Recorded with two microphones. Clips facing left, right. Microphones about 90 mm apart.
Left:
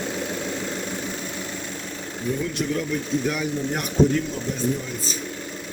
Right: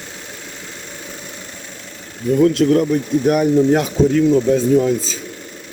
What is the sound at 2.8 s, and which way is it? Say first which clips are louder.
Speech: right 8 dB; 50° right (ahead or behind).